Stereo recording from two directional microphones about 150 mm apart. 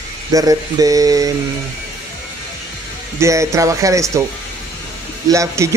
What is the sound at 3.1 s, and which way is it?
Speech, 20° right (ahead or behind).